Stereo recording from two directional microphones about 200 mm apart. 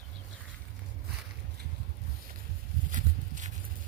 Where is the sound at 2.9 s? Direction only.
40° right (ahead or behind).